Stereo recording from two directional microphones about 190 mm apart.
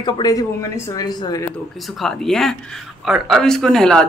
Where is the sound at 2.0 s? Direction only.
Centre (ahead or behind).